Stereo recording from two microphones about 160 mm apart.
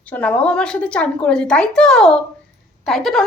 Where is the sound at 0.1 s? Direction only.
10° left (ahead or behind).